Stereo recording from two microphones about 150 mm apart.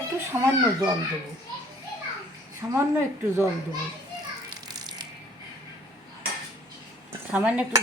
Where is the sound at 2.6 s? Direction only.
20° right (ahead or behind).